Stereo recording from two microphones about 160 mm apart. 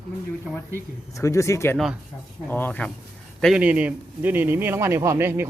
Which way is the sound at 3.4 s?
5° right (ahead or behind).